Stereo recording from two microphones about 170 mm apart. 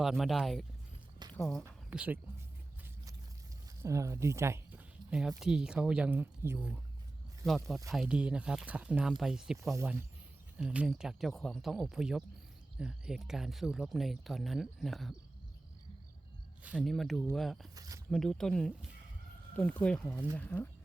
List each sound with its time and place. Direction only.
0.0 s speech: centre (ahead or behind)
1.6 s speech: 10° right (ahead or behind)
3.8 s speech: 15° right (ahead or behind)
7.4 s speech: centre (ahead or behind)
16.6 s speech: centre (ahead or behind)
17.7 s speech: 20° right (ahead or behind)
18.1 s speech: 5° left (ahead or behind)